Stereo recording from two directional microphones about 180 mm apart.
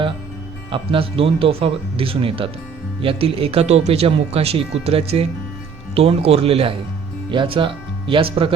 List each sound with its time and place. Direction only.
0.7 s speech: 30° right (ahead or behind)